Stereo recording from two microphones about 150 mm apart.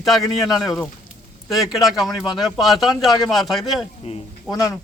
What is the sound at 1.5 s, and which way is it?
Speech, centre (ahead or behind).